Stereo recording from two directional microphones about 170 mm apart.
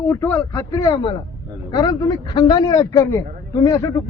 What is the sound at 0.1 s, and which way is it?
A man's voice, 15° left (ahead or behind).